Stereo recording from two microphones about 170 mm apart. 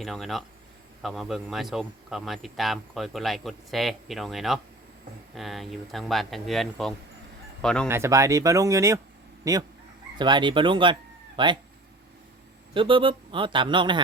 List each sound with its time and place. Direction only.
0.0 s speech: centre (ahead or behind)
7.9 s speech: 15° right (ahead or behind)
12.7 s speech: 30° right (ahead or behind)